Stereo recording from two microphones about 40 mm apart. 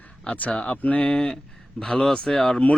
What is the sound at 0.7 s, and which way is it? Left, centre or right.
Speech, left.